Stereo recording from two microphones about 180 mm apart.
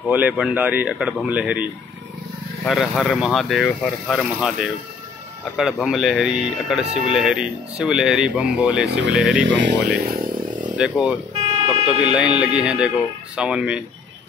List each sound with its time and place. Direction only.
0.1 s speech: 10° right (ahead or behind)
9.5 s speech: 85° right
10.0 s speech: 55° right (ahead or behind)
10.8 s speech: 5° right (ahead or behind)